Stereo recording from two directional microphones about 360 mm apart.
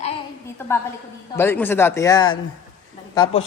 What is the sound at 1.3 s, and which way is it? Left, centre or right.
A woman's voice, centre.